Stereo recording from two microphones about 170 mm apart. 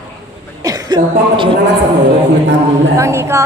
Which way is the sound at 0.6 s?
20° right (ahead or behind).